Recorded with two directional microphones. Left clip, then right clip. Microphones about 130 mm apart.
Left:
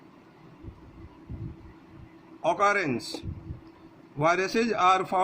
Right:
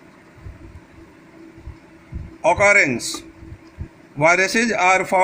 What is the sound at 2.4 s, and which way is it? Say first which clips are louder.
Speech: right 10 dB; 25° right (ahead or behind).